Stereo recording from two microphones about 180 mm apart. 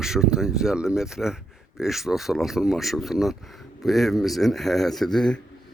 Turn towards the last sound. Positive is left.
turn(degrees=5)  # may be behind; listen again after turning